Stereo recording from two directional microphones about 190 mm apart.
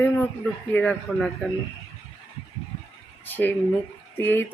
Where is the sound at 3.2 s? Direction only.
10° left (ahead or behind).